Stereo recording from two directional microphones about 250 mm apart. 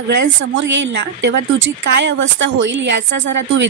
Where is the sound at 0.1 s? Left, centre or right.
Right.